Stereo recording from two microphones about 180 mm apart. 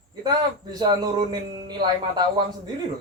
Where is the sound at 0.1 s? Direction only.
25° right (ahead or behind).